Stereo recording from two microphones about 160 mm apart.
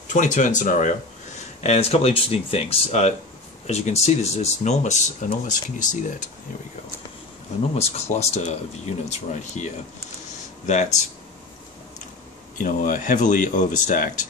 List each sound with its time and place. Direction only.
0.1 s speech: 50° left (ahead or behind)
7.7 s speech: 40° left (ahead or behind)
10.7 s speech: 45° left (ahead or behind)
12.5 s speech: 55° left (ahead or behind)